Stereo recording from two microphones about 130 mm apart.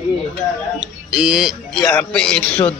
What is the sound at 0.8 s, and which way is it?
A man's voice, 5° right (ahead or behind).